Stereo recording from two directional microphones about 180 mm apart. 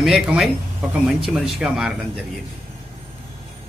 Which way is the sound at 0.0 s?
Centre (ahead or behind).